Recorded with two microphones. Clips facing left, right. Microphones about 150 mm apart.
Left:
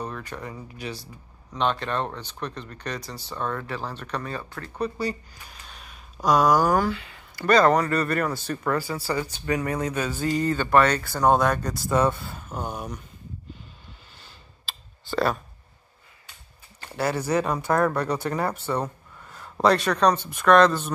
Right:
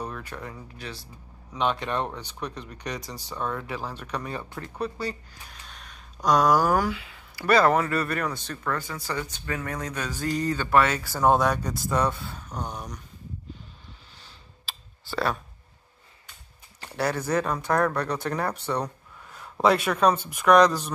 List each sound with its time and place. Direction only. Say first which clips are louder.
0.0 s speech: left 2 dB; 5° right (ahead or behind)
1.5 s speech: left 1 dB; 10° right (ahead or behind)
4.3 s speech: even; 20° right (ahead or behind)
4.7 s speech: left 3 dB; centre (ahead or behind)
14.7 s clicking: left 4 dB; centre (ahead or behind)
16.9 s speech: left 1 dB; 5° left (ahead or behind)